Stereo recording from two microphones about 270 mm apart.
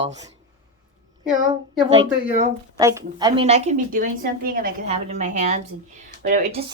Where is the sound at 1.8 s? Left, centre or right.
Right.